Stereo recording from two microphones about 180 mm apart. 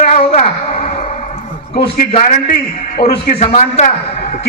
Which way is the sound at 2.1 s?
35° left (ahead or behind).